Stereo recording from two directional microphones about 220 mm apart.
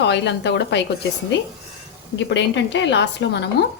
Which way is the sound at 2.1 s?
50° left (ahead or behind).